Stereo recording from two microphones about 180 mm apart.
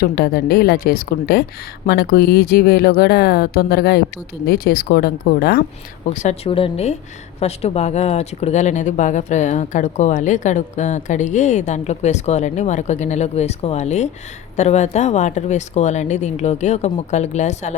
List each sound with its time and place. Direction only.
0.0 s speech: 55° left (ahead or behind)
6.1 s speech: 35° left (ahead or behind)